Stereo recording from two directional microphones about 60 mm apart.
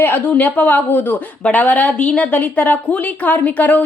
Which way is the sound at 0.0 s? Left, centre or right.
Left.